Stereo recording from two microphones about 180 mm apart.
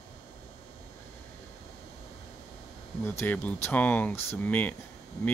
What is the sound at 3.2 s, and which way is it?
Speech, 10° left (ahead or behind).